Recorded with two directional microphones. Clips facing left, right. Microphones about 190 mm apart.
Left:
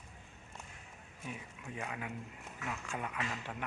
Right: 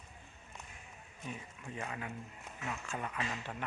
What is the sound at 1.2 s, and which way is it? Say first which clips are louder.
Speech: even; 10° left (ahead or behind).